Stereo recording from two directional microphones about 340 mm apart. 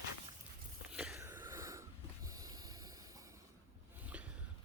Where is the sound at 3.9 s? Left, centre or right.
Centre.